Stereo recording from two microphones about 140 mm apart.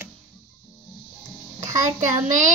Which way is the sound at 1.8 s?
65° right (ahead or behind).